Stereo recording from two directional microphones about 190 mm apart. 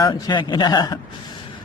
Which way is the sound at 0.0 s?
20° left (ahead or behind).